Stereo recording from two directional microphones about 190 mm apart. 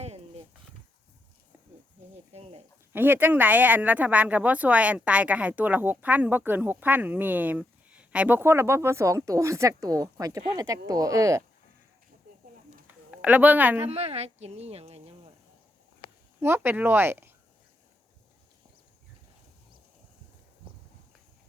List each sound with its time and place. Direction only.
0.0 s a sound: 35° right (ahead or behind)
2.3 s speech: 30° right (ahead or behind)
2.9 s speech: 10° right (ahead or behind)
13.1 s a woman's voice: 5° right (ahead or behind)
13.8 s speech: 35° right (ahead or behind)
16.4 s speech: 10° right (ahead or behind)